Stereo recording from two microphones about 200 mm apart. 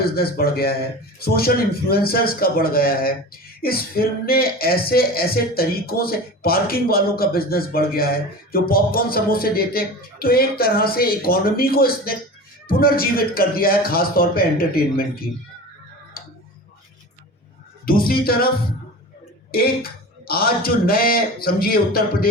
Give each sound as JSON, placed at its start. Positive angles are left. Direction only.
{"t": 0.0, "sound": "speech", "side_deg": 50}
{"t": 17.8, "sound": "speech", "side_deg": 45}